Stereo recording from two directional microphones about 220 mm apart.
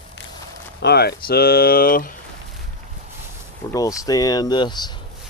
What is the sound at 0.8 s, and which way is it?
Speech, 45° left (ahead or behind).